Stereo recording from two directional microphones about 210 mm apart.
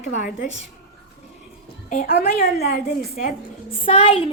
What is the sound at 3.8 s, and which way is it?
Speech, 30° left (ahead or behind).